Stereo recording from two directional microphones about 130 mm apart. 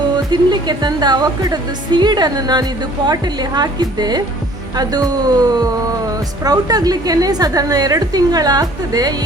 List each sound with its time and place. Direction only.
0.3 s a woman's voice: 35° right (ahead or behind)